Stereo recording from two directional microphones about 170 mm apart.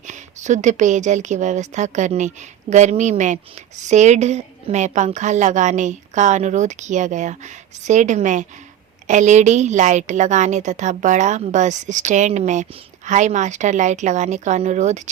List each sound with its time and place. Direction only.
0.1 s a woman's voice: 45° right (ahead or behind)